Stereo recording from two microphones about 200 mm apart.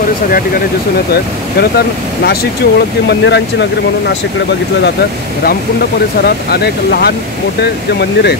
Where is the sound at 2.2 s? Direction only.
50° left (ahead or behind).